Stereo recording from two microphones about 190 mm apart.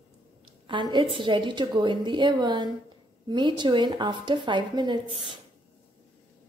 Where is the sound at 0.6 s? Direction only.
25° right (ahead or behind).